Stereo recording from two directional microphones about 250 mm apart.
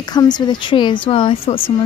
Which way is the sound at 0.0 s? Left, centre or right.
Centre.